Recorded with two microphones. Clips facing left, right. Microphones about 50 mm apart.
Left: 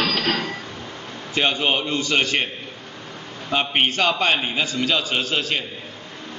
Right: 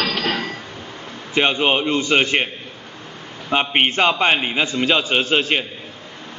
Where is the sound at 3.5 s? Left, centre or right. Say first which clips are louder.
Right 3 dB; right.